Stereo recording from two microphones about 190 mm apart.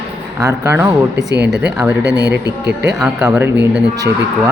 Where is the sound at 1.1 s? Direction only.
65° right (ahead or behind).